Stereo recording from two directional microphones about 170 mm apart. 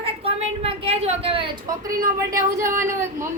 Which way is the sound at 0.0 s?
35° right (ahead or behind).